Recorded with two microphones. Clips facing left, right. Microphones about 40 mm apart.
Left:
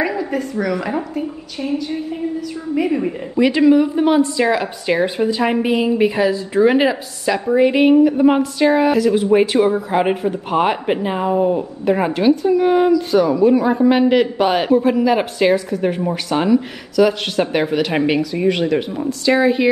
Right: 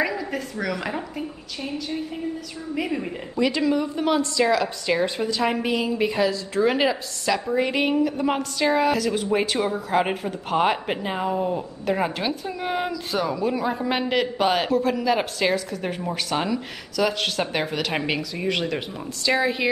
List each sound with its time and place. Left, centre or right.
0.3 s speech: centre
2.8 s a woman's voice: centre